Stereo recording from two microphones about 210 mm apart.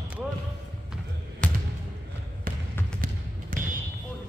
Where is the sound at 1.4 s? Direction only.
5° left (ahead or behind).